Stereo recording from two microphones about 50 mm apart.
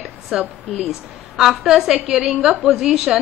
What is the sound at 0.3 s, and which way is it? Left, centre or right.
A woman's voice, centre.